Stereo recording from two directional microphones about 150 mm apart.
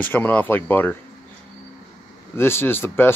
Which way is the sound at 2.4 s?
15° left (ahead or behind).